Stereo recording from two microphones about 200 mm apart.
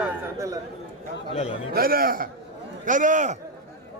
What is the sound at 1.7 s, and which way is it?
A man's voice, 45° right (ahead or behind).